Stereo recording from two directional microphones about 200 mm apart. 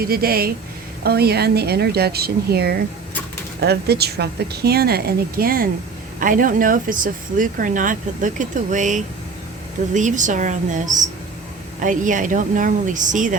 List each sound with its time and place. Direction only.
0.0 s speech: 50° right (ahead or behind)